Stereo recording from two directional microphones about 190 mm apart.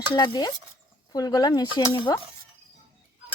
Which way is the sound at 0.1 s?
20° left (ahead or behind).